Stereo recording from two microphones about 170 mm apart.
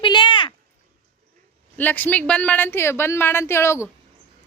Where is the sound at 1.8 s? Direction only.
10° left (ahead or behind).